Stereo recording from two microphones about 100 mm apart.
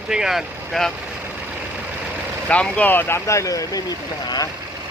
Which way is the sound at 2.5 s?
15° left (ahead or behind).